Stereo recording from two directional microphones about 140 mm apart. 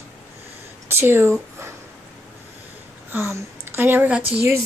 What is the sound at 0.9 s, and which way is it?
Speech, 15° right (ahead or behind).